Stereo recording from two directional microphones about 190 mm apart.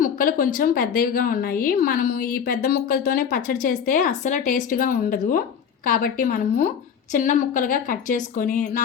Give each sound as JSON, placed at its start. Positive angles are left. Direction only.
{"t": 0.0, "sound": "a woman's voice", "side_deg": 45}